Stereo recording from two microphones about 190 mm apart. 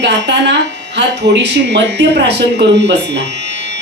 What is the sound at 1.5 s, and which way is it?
Speech, 65° right (ahead or behind).